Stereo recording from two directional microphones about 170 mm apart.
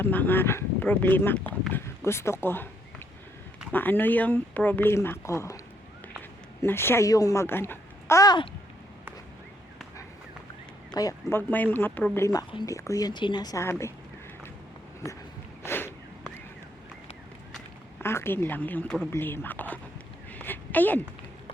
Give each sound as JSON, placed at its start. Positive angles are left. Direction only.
{"t": 0.0, "sound": "speech", "side_deg": 10}
{"t": 3.7, "sound": "speech", "side_deg": 10}
{"t": 6.6, "sound": "speech", "side_deg": 15}
{"t": 10.9, "sound": "speech", "side_deg": 15}
{"t": 15.6, "sound": "a sound", "side_deg": 15}
{"t": 18.0, "sound": "speech", "side_deg": 15}
{"t": 20.3, "sound": "a sound", "side_deg": 10}